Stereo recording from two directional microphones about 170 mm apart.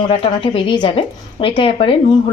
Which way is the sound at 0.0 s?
30° left (ahead or behind).